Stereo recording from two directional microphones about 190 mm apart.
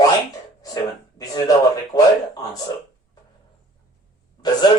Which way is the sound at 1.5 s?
20° left (ahead or behind).